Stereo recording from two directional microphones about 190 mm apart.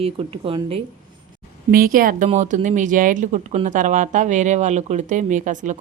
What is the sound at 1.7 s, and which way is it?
A woman's voice, 50° right (ahead or behind).